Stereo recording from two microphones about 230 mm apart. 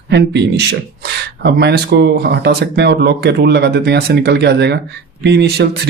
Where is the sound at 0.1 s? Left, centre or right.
Right.